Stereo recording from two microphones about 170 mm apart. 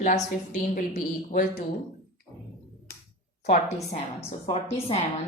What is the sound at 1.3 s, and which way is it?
Speech, 50° left (ahead or behind).